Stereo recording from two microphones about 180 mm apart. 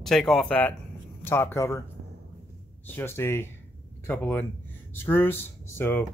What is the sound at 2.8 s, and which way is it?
Speech, 10° left (ahead or behind).